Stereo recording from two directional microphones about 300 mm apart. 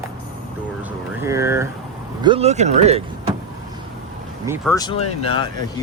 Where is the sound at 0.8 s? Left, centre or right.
Centre.